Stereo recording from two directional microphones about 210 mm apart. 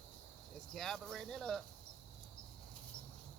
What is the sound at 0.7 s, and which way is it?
Speech, centre (ahead or behind).